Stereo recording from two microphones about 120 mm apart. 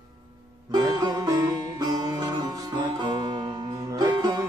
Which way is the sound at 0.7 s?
35° right (ahead or behind).